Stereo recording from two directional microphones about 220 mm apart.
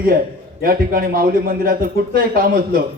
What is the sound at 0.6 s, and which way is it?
A man's voice, 40° right (ahead or behind).